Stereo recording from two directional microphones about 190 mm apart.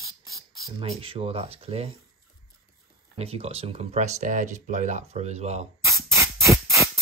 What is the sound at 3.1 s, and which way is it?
Speech, 30° right (ahead or behind).